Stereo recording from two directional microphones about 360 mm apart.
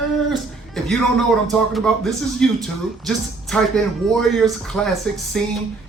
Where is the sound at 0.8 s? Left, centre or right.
Centre.